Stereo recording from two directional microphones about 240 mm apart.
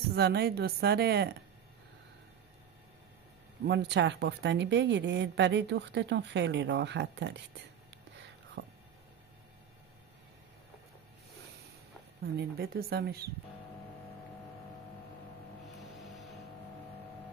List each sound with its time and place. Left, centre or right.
0.1 s a woman's voice: right
3.6 s speech: right
12.4 s a woman's voice: right
15.8 s music: centre